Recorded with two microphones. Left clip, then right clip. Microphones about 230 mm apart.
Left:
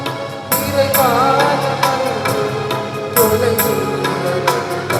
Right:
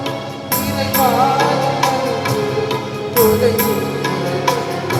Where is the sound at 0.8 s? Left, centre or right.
Left.